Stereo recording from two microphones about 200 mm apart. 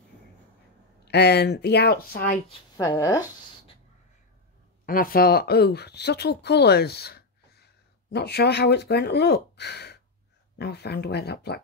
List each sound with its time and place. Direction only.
1.0 s speech: 55° left (ahead or behind)
2.8 s speech: 15° left (ahead or behind)
4.8 s speech: 45° left (ahead or behind)